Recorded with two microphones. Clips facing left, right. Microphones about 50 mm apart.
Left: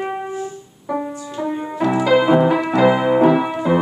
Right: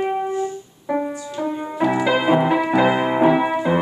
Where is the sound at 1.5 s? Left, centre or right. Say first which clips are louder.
Left 2 dB; centre.